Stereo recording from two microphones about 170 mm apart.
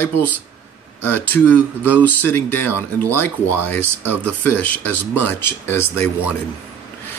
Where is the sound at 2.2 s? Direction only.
10° left (ahead or behind).